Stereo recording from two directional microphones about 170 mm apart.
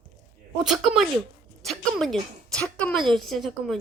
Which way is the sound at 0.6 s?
5° right (ahead or behind).